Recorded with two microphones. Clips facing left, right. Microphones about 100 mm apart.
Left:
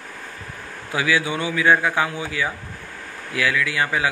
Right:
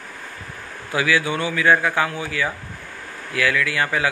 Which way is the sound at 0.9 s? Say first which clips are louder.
Right 1 dB; 15° left (ahead or behind).